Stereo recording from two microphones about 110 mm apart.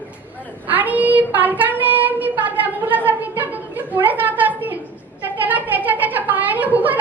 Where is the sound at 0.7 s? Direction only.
15° right (ahead or behind).